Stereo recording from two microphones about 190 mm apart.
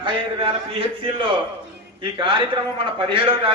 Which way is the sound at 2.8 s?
25° right (ahead or behind).